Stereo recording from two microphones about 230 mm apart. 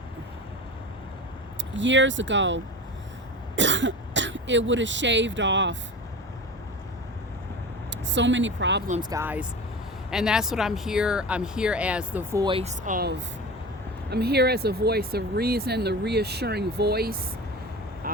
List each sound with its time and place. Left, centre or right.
1.7 s speech: right
7.9 s speech: right
9.0 s speech: centre; by 17.2 s right